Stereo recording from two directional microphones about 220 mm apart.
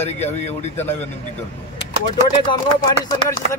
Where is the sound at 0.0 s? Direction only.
30° left (ahead or behind).